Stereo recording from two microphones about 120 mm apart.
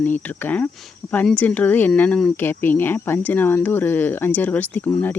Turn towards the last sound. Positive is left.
turn(degrees=15)  # may be behind; listen again after turning